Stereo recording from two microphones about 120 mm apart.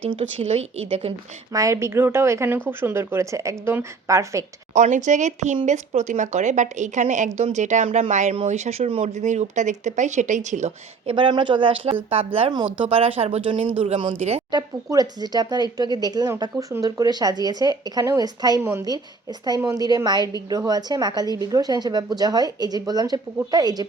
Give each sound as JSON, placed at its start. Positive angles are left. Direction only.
{"t": 0.0, "sound": "speech", "side_deg": -45}
{"t": 0.3, "sound": "a woman's voice", "side_deg": -60}
{"t": 1.5, "sound": "speech", "side_deg": -25}
{"t": 4.7, "sound": "a woman's voice", "side_deg": -85}
{"t": 5.6, "sound": "a woman's voice", "side_deg": -75}
{"t": 7.3, "sound": "a woman's voice", "side_deg": -80}
{"t": 8.4, "sound": "speech", "side_deg": -70}
{"t": 11.0, "sound": "a woman's voice", "side_deg": -45}
{"t": 14.5, "sound": "a woman's voice", "side_deg": -35}